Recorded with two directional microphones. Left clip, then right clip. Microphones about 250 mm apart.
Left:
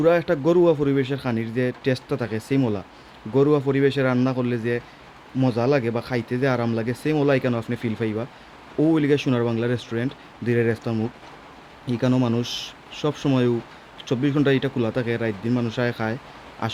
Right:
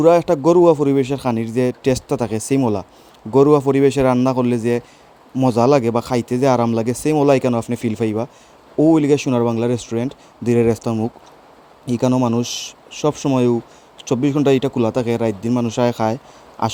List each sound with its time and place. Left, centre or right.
0.0 s a man's voice: right